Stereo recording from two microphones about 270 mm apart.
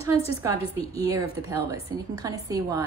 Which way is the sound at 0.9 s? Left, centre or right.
Centre.